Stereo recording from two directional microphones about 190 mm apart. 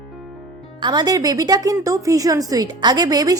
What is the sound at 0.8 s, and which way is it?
A woman's voice, 20° right (ahead or behind).